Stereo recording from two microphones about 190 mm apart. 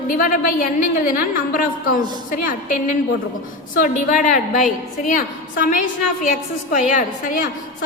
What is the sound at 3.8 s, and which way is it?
A woman's voice, 45° left (ahead or behind).